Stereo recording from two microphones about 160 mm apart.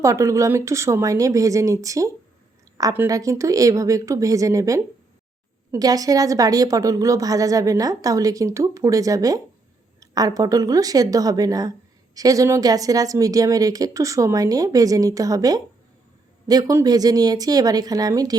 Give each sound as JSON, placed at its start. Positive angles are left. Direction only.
{"t": 0.0, "sound": "a woman's voice", "side_deg": -20}